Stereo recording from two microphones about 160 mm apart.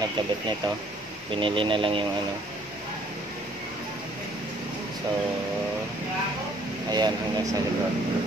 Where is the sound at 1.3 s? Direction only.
30° right (ahead or behind).